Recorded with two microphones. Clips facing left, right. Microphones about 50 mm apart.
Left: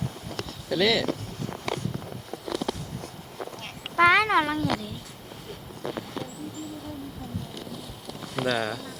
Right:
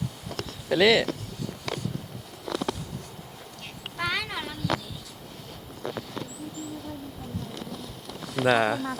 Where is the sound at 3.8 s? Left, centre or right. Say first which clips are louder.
Left 11 dB; left.